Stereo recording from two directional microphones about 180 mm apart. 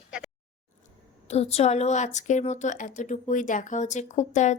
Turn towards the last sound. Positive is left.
turn(degrees=40)  # may be behind; listen again after turning